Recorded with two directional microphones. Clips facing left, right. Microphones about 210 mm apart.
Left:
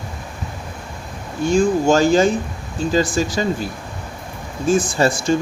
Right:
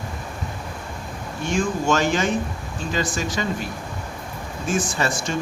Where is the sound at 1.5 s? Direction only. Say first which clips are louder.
Left 7 dB; 35° left (ahead or behind).